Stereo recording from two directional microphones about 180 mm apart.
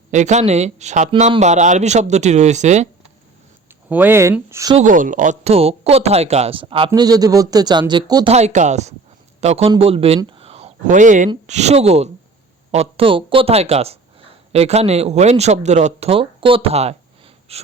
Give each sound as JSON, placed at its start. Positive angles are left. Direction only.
{"t": 0.1, "sound": "speech", "side_deg": -40}
{"t": 3.8, "sound": "speech", "side_deg": -10}
{"t": 4.8, "sound": "speech", "side_deg": -45}
{"t": 8.3, "sound": "speech", "side_deg": -40}
{"t": 10.2, "sound": "a sound", "side_deg": -30}
{"t": 11.4, "sound": "speech", "side_deg": -40}